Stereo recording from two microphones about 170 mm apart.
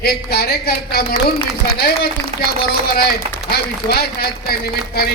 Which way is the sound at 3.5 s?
65° left (ahead or behind).